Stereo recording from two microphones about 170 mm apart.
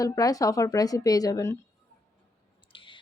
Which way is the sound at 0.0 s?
20° left (ahead or behind).